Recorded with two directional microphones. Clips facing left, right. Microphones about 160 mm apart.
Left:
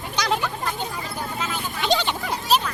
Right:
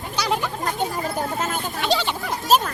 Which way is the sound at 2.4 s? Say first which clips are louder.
Right 4 dB; 45° right (ahead or behind).